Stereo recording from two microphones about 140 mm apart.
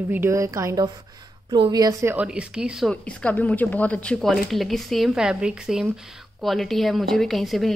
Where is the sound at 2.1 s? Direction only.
10° right (ahead or behind).